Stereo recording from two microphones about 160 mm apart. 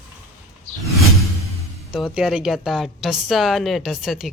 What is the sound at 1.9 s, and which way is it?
A woman's voice, centre (ahead or behind).